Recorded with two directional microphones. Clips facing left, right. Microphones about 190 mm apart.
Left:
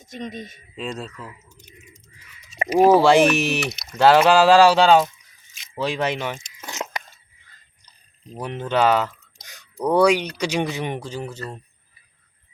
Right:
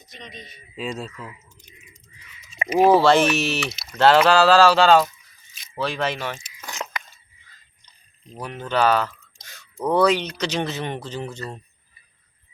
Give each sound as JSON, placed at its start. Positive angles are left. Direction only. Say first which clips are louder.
{"t": 0.0, "sound": "speech", "louder": "left 9 dB", "side_deg": 45}
{"t": 0.8, "sound": "speech", "louder": "even", "side_deg": 0}
{"t": 2.5, "sound": "a sound", "louder": "left 3 dB", "side_deg": 40}
{"t": 2.9, "sound": "speech", "louder": "left 2 dB", "side_deg": 15}
{"t": 8.4, "sound": "speech", "louder": "left 2 dB", "side_deg": 20}